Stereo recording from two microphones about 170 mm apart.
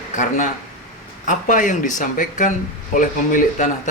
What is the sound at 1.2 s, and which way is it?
A man's voice, 50° left (ahead or behind).